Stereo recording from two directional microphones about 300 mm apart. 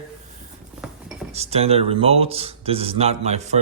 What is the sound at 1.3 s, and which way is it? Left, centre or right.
Speech, right.